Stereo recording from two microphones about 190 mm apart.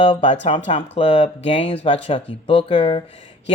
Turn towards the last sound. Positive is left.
turn(degrees=25)  # may be behind; listen again after turning